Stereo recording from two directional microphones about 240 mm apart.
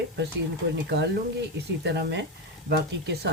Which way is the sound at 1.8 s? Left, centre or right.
Right.